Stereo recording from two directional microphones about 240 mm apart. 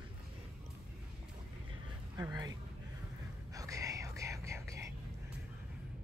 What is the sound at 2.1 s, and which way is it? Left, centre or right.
Speech, centre.